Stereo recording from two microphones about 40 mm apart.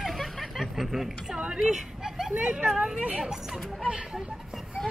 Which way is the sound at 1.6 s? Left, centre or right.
Centre.